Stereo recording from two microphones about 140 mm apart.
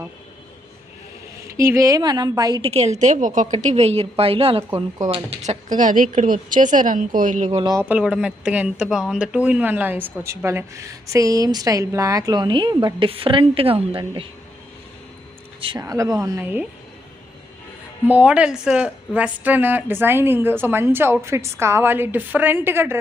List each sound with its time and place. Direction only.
1.5 s speech: 20° right (ahead or behind)
2.6 s a woman's voice: 45° right (ahead or behind)
5.6 s a woman's voice: 65° right (ahead or behind)
7.8 s speech: 10° right (ahead or behind); by 14.0 s 40° right (ahead or behind)
15.8 s speech: 25° right (ahead or behind)
18.1 s a woman's voice: 10° right (ahead or behind)